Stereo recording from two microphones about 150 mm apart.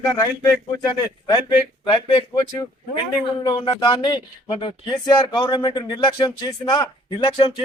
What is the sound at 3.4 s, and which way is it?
Speech, 30° left (ahead or behind).